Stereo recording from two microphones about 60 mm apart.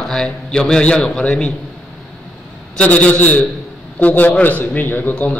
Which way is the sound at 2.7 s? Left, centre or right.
Left.